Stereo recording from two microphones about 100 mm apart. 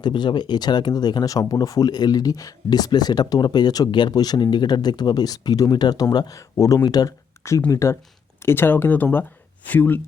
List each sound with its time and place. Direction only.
0.0 s speech: 50° left (ahead or behind); by 10.0 s 15° left (ahead or behind)